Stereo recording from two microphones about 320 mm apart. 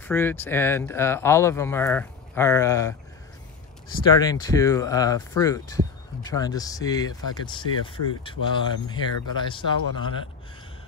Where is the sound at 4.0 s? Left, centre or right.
Centre.